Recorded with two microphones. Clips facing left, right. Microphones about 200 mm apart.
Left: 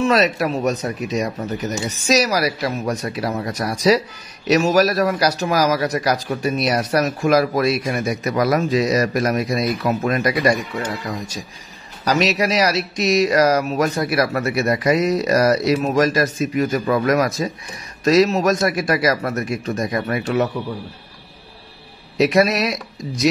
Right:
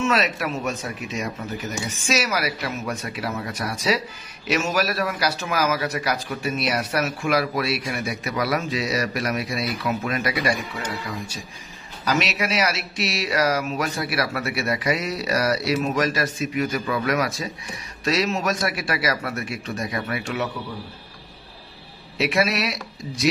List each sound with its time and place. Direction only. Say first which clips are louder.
0.0 s a man's voice: left 6 dB; 35° left (ahead or behind)
12.0 s a man's voice: left 6 dB; 40° left (ahead or behind)
22.1 s a man's voice: left 6 dB; 40° left (ahead or behind)